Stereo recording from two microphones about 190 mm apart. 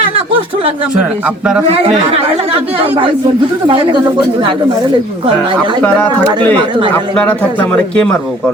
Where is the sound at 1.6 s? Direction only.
30° right (ahead or behind).